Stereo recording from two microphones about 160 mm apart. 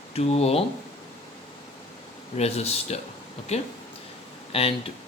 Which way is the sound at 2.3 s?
40° left (ahead or behind).